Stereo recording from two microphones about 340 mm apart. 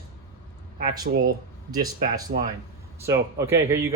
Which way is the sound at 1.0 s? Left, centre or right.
Right.